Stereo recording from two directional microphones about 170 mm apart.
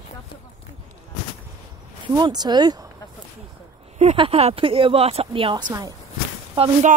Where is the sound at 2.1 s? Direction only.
25° right (ahead or behind).